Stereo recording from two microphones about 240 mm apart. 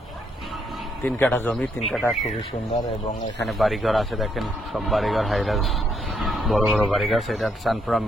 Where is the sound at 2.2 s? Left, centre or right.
Left.